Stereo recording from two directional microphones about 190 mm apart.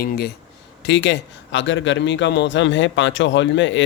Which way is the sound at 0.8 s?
70° left (ahead or behind).